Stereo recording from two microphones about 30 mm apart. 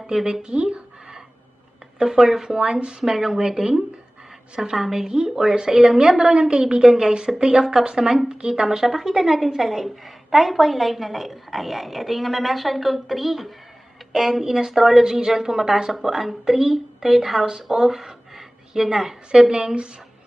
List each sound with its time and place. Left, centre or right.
0.4 s speech: right
2.0 s speech: centre
2.6 s a woman's voice: right
3.0 s speech: centre
3.4 s a woman's voice: right
4.7 s a woman's voice: centre
7.3 s a woman's voice: right
7.6 s speech: centre
7.9 s a woman's voice: right
8.6 s a woman's voice: centre
15.9 s speech: centre
17.7 s a sound: centre
19.3 s a woman's voice: right